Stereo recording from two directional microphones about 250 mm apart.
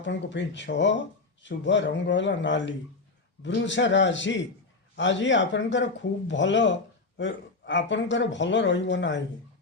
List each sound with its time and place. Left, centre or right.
0.0 s a man's voice: left